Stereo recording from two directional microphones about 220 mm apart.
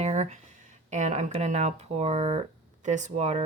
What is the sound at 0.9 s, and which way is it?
Speech, 35° right (ahead or behind).